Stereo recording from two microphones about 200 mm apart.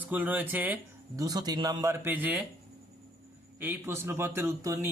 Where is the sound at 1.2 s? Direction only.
20° right (ahead or behind).